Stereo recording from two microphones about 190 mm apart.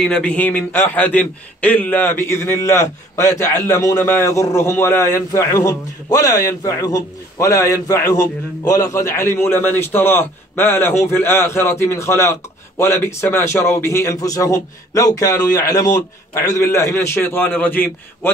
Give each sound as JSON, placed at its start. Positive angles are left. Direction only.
{"t": 0.0, "sound": "a man's voice", "side_deg": 5}